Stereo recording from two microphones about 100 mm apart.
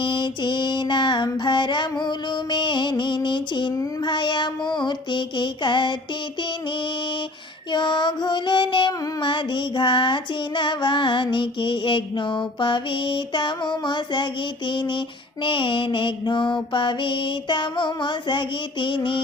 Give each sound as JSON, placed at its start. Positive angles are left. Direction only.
{"t": 0.0, "sound": "music", "side_deg": 55}
{"t": 3.2, "sound": "a sound", "side_deg": 50}
{"t": 4.0, "sound": "music", "side_deg": 50}
{"t": 7.7, "sound": "music", "side_deg": 50}